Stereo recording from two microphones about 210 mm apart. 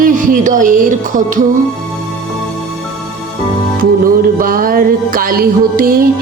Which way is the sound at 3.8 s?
40° right (ahead or behind).